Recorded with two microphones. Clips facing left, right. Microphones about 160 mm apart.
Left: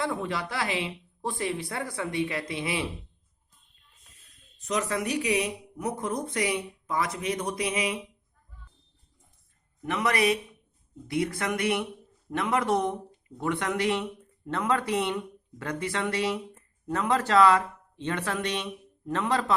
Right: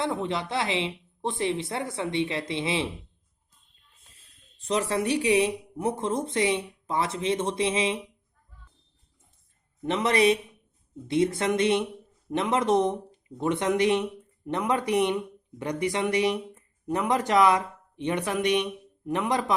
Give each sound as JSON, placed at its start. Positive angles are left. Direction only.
{"t": 0.0, "sound": "speech", "side_deg": -20}
{"t": 4.0, "sound": "speech", "side_deg": -30}
{"t": 9.8, "sound": "speech", "side_deg": -25}